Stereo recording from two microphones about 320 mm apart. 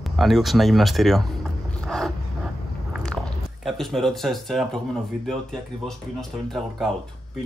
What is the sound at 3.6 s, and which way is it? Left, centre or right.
Speech, centre.